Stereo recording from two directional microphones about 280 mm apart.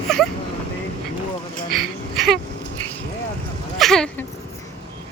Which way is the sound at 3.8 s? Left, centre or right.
Centre.